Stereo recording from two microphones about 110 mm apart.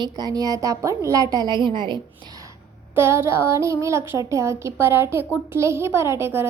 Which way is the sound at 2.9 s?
25° right (ahead or behind).